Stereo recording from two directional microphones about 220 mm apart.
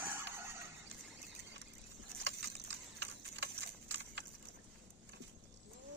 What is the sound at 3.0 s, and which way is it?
Clip-clop, 55° right (ahead or behind).